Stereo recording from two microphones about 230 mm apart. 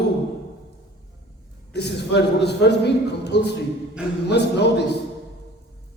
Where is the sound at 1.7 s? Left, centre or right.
Left.